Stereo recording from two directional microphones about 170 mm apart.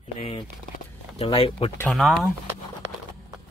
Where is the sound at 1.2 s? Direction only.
35° left (ahead or behind).